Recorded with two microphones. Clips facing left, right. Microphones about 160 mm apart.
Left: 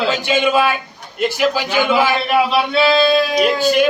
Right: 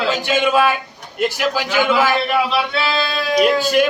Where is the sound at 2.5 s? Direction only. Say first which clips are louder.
Left 5 dB; 20° left (ahead or behind).